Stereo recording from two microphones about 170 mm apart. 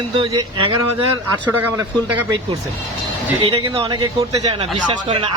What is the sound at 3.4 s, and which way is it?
A man's voice, 30° right (ahead or behind).